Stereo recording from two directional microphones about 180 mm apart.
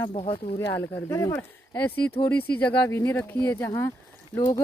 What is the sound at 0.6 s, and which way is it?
Speech, 15° left (ahead or behind).